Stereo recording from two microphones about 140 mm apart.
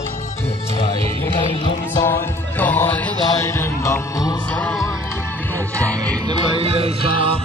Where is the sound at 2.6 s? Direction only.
10° left (ahead or behind).